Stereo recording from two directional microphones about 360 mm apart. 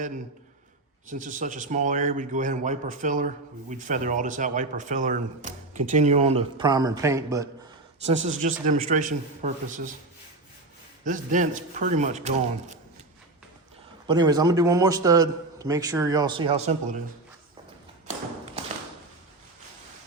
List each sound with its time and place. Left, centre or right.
1.1 s speech: right
8.3 s speech: right
11.0 s speech: right
14.1 s a man's voice: centre